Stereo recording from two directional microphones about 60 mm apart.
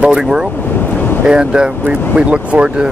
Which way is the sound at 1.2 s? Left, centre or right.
Centre.